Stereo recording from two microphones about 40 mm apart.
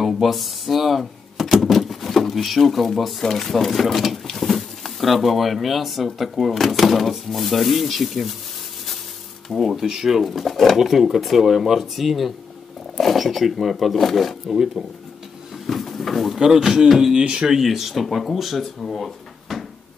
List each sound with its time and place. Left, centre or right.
0.0 s a sound: centre
2.6 s speech: centre
9.5 s speech: centre
10.8 s speech: centre
15.5 s a sound: centre
16.3 s speech: centre
17.2 s speech: centre
17.6 s speech: centre
18.8 s drawer open or close: centre